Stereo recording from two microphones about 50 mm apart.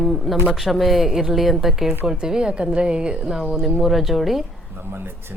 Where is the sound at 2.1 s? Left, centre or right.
Centre.